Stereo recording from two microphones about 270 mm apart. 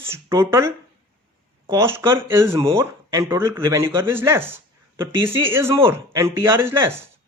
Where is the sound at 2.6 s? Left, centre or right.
Centre.